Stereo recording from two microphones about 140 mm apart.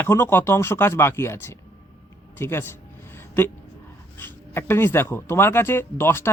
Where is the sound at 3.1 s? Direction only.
15° left (ahead or behind).